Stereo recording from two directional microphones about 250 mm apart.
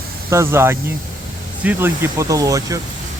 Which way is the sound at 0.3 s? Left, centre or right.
Centre.